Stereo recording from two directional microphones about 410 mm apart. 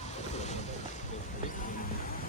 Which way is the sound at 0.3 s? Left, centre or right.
Centre.